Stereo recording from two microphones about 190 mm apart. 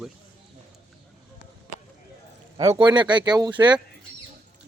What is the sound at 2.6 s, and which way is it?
Speech, 20° right (ahead or behind).